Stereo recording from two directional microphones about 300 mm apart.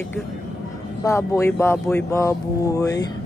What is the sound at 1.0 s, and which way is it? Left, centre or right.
Speech, centre.